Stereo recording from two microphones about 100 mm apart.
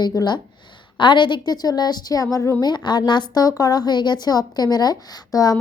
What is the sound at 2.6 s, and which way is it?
A woman's voice, 45° left (ahead or behind).